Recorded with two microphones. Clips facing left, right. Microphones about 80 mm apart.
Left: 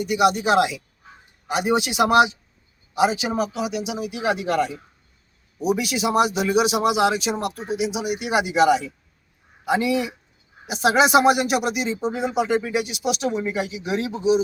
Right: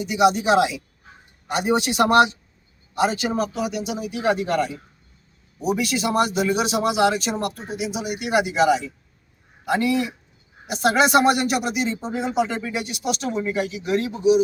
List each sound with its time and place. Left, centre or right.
0.1 s speech: centre
5.5 s a man's voice: centre
14.2 s speech: left